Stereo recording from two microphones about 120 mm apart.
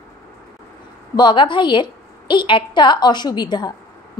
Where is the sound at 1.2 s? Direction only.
40° left (ahead or behind).